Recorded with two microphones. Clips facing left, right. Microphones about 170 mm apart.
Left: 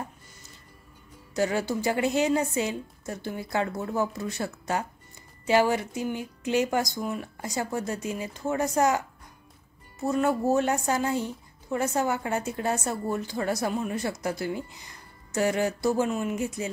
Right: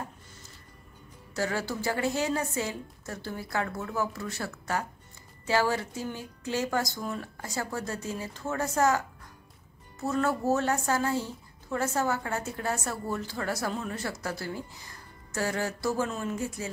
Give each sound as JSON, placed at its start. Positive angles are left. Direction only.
{"t": 1.3, "sound": "a woman's voice", "side_deg": 20}